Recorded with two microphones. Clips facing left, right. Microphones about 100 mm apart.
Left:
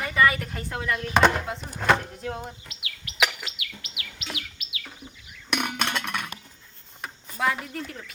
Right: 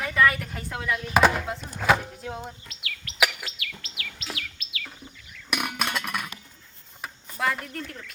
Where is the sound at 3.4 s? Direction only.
15° left (ahead or behind).